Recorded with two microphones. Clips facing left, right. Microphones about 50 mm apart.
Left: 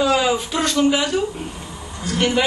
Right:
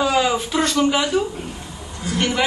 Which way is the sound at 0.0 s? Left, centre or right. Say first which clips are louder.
Left 1 dB; centre.